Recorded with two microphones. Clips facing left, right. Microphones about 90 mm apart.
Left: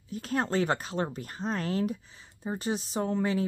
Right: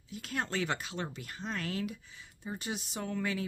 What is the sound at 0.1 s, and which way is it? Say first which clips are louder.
Speech: left 7 dB; 40° left (ahead or behind).